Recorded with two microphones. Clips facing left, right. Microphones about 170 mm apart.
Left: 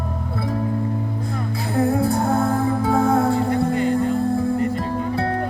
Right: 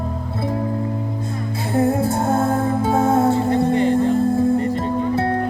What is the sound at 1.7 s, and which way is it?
Music, 25° right (ahead or behind).